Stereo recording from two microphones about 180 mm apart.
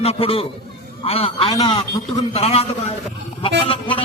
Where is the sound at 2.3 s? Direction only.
35° left (ahead or behind).